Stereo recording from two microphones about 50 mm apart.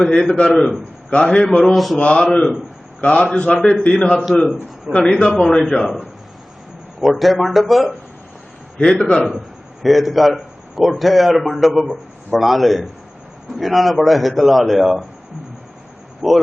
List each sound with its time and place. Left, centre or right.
0.0 s a man's voice: centre
2.0 s a man's voice: centre
5.8 s a man's voice: centre
8.8 s a man's voice: centre
9.8 s a man's voice: centre
16.2 s a man's voice: centre